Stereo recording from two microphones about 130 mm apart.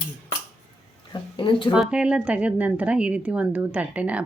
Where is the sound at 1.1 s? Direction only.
40° left (ahead or behind).